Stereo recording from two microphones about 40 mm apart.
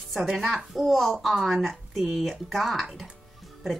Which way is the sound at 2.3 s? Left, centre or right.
Centre.